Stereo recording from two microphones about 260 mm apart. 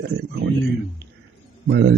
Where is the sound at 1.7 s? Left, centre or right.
Right.